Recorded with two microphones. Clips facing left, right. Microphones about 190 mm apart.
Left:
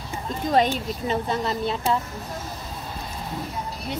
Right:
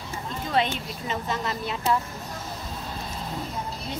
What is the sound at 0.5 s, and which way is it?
Speech, 40° left (ahead or behind).